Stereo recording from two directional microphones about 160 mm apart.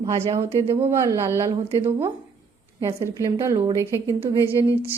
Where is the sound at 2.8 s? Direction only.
20° right (ahead or behind).